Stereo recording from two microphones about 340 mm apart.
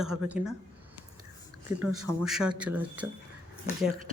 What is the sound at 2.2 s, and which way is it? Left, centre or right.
Speech, centre.